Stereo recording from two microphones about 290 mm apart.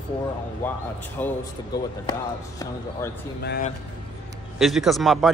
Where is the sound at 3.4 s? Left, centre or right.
Left.